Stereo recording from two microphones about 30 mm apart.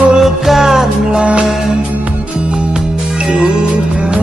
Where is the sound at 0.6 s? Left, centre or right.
Right.